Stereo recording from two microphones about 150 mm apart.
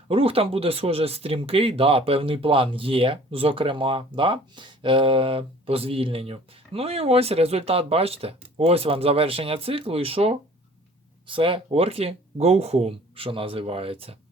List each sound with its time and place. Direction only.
0.1 s speech: 40° right (ahead or behind)